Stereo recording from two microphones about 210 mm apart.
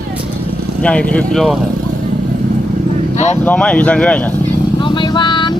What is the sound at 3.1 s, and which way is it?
Speech, 35° left (ahead or behind).